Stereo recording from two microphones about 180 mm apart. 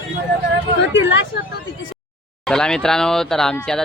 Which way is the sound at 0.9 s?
90° left.